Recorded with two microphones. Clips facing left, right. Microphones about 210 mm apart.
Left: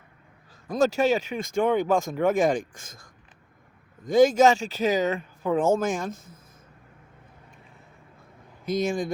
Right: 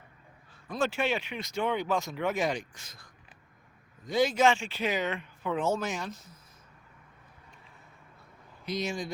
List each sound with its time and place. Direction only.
0.7 s speech: 40° left (ahead or behind)
8.6 s speech: 50° left (ahead or behind)